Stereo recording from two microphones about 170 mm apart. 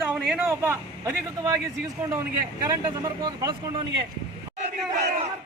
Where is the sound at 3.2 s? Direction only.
25° right (ahead or behind).